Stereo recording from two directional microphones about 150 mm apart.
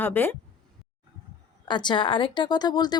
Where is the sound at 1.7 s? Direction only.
30° left (ahead or behind).